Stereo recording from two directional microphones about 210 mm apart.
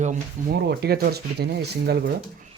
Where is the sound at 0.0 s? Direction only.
35° right (ahead or behind).